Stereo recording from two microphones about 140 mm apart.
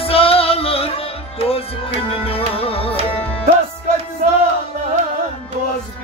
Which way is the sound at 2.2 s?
45° left (ahead or behind).